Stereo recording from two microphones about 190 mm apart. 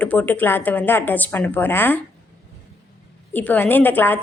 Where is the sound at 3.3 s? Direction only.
10° left (ahead or behind).